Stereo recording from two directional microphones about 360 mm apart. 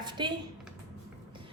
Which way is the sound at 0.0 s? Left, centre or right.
Centre.